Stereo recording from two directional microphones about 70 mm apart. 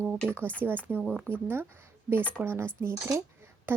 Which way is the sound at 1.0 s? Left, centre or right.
Centre.